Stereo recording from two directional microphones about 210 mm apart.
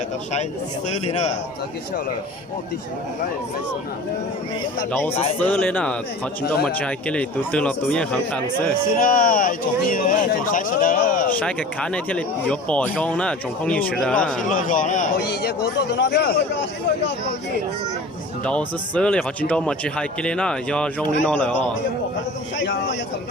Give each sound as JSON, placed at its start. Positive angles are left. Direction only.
{"t": 0.9, "sound": "speech", "side_deg": 30}
{"t": 4.9, "sound": "speech", "side_deg": 10}
{"t": 9.0, "sound": "speech", "side_deg": 40}
{"t": 11.3, "sound": "speech", "side_deg": 5}
{"t": 14.5, "sound": "speech", "side_deg": 40}
{"t": 15.3, "sound": "speech", "side_deg": 50}
{"t": 18.4, "sound": "speech", "side_deg": 5}